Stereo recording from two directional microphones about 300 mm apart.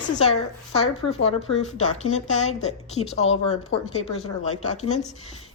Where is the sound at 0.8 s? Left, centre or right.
Left.